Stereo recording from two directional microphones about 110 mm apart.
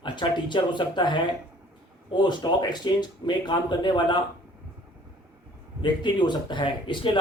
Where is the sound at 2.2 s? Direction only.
40° left (ahead or behind).